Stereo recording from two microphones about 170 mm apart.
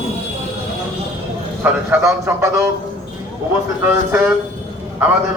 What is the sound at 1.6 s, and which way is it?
Speech, 15° right (ahead or behind).